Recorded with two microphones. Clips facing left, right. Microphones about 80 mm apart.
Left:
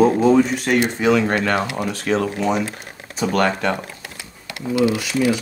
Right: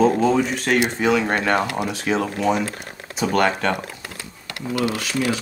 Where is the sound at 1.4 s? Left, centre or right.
Right.